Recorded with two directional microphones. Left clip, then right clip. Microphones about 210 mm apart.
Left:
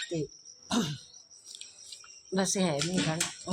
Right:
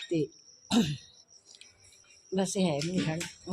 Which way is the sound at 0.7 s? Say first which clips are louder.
Right 2 dB; 20° right (ahead or behind).